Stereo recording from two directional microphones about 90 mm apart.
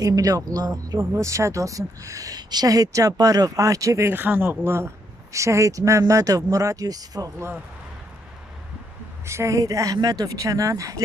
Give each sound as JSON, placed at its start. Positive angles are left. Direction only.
{"t": 0.0, "sound": "speech", "side_deg": -40}
{"t": 4.1, "sound": "speech", "side_deg": -20}
{"t": 9.2, "sound": "speech", "side_deg": -30}